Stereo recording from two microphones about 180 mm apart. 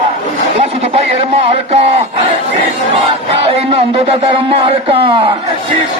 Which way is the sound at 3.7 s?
30° right (ahead or behind).